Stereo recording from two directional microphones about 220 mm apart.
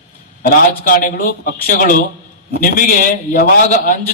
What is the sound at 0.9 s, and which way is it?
A man's voice, 40° left (ahead or behind).